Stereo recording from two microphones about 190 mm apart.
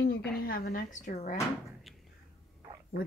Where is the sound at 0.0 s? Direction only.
50° left (ahead or behind).